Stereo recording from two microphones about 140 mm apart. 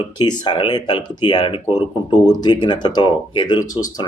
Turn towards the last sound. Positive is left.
turn(degrees=25)  # may be behind; listen again after turning